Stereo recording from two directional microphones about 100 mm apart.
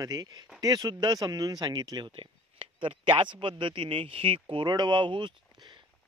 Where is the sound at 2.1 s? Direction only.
60° right (ahead or behind).